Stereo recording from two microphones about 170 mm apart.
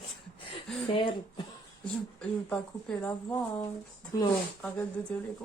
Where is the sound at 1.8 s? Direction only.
5° left (ahead or behind).